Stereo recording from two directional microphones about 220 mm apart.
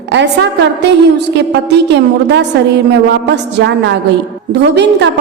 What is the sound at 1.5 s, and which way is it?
Speech, 50° right (ahead or behind).